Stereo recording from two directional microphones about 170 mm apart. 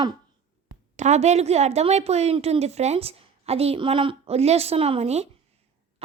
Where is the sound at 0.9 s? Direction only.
40° right (ahead or behind).